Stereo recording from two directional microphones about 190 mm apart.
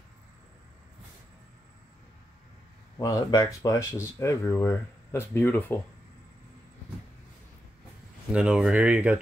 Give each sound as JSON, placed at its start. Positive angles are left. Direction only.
{"t": 3.0, "sound": "speech", "side_deg": 20}
{"t": 8.3, "sound": "speech", "side_deg": -5}